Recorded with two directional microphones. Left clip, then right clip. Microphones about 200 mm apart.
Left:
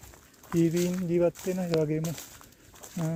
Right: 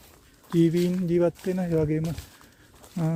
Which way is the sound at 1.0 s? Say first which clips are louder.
Right 1 dB; 35° right (ahead or behind).